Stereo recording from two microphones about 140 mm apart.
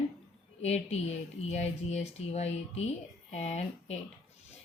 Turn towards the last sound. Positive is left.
turn(degrees=50)  # may be behind; listen again after turning